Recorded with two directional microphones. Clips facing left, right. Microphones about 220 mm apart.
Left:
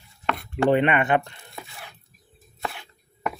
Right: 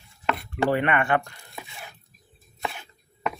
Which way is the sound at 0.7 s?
20° left (ahead or behind).